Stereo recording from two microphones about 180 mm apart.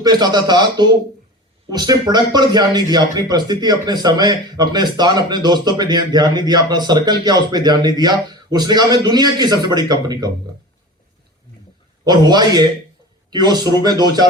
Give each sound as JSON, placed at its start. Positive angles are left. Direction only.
{"t": 0.0, "sound": "speech", "side_deg": -25}
{"t": 12.0, "sound": "speech", "side_deg": -25}